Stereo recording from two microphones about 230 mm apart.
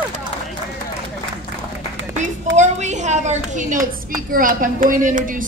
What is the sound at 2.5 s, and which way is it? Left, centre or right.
A woman's voice, right.